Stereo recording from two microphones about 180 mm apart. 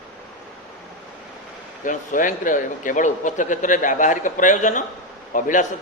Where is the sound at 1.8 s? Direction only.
45° left (ahead or behind).